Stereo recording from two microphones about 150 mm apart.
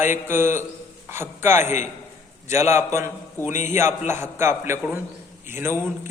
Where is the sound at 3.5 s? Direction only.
55° left (ahead or behind).